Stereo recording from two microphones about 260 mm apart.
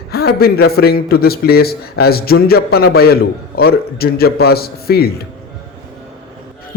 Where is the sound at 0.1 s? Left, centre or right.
Left.